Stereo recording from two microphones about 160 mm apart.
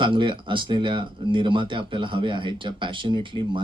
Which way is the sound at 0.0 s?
30° right (ahead or behind).